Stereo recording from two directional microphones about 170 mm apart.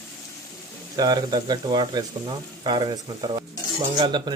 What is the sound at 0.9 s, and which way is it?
Speech, 25° right (ahead or behind).